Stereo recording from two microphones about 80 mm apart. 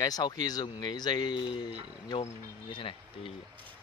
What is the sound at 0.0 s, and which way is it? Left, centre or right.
Speech, left.